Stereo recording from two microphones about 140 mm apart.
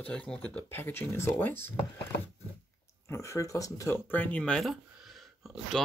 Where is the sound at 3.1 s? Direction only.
20° left (ahead or behind).